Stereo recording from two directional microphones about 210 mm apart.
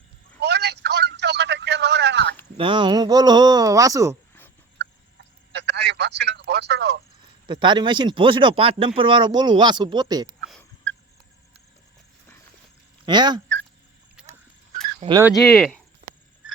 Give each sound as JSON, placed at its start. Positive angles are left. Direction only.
{"t": 0.3, "sound": "telephone", "side_deg": -50}
{"t": 2.6, "sound": "speech", "side_deg": -25}
{"t": 5.5, "sound": "telephone", "side_deg": -55}
{"t": 7.4, "sound": "speech", "side_deg": -20}
{"t": 13.1, "sound": "speech", "side_deg": -20}
{"t": 14.2, "sound": "a sound", "side_deg": -5}
{"t": 15.0, "sound": "cricket", "side_deg": -30}
{"t": 15.4, "sound": "speech", "side_deg": 5}